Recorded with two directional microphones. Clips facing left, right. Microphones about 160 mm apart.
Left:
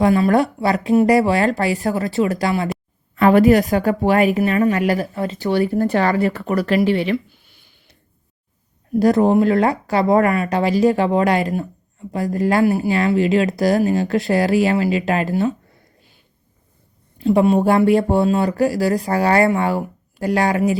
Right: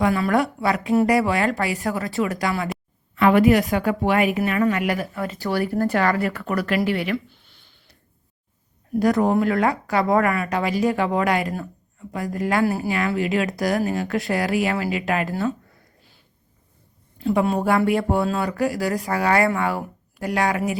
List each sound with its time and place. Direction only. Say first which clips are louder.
0.0 s speech: left 5 dB; 30° left (ahead or behind)
8.9 s speech: left 4 dB; 30° left (ahead or behind)
17.2 s speech: left 6 dB; 25° left (ahead or behind)